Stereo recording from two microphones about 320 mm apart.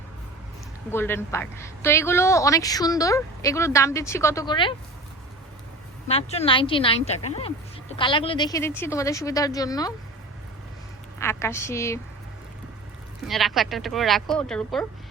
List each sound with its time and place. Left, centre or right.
0.9 s a woman's voice: centre
6.1 s a woman's voice: centre
11.2 s a woman's voice: centre
13.2 s speech: centre